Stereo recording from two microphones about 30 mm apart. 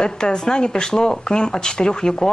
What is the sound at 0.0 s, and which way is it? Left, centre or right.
Speech, left.